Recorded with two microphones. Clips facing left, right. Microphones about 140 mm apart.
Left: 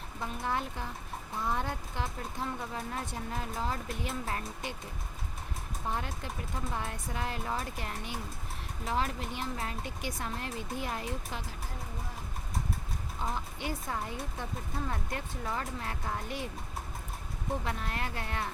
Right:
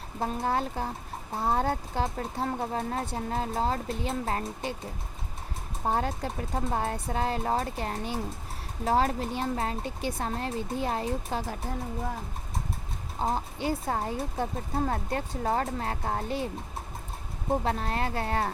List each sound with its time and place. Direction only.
0.2 s speech: 35° right (ahead or behind)
5.8 s speech: 40° right (ahead or behind)
13.1 s speech: 35° right (ahead or behind)
17.5 s speech: 35° right (ahead or behind)